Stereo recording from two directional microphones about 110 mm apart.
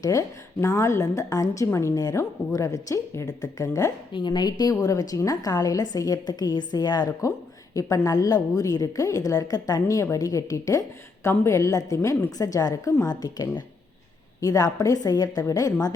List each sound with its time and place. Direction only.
0.0 s a woman's voice: 30° left (ahead or behind)
4.1 s a woman's voice: 40° left (ahead or behind)